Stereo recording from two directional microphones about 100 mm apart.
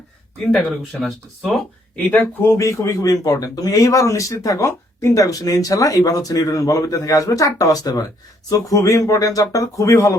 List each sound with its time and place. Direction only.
0.9 s speech: 5° right (ahead or behind)
2.0 s speech: 20° left (ahead or behind)